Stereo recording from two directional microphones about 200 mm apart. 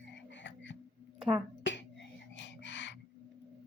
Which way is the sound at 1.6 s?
65° left (ahead or behind).